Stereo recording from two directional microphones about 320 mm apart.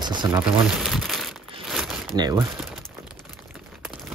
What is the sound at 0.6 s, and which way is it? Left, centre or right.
Crumpling, centre.